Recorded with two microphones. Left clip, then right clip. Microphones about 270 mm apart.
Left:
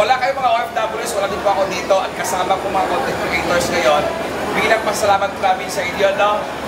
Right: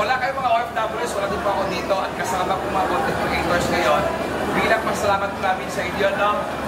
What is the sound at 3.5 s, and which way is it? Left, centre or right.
Speech, centre.